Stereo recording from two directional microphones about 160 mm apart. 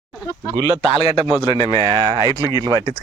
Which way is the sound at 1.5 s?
20° left (ahead or behind).